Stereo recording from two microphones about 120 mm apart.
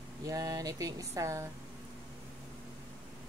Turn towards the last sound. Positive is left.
turn(degrees=-25)  # may be behind; listen again after turning